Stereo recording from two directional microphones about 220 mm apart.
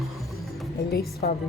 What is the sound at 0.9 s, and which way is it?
Speech, 45° left (ahead or behind).